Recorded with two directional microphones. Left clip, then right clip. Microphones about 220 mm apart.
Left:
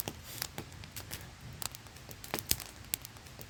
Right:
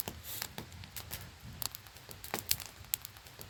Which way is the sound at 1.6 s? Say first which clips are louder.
Even; centre (ahead or behind).